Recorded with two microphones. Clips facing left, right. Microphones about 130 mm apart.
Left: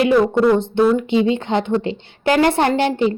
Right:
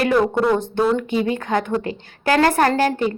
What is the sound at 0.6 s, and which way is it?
A woman's voice, 20° left (ahead or behind).